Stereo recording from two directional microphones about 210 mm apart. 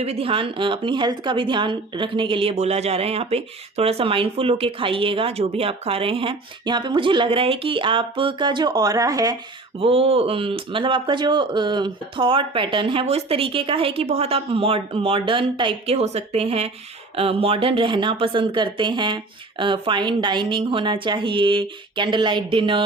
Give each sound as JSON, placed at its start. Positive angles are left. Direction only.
{"t": 0.0, "sound": "a woman's voice", "side_deg": -30}
{"t": 9.7, "sound": "a woman's voice", "side_deg": -25}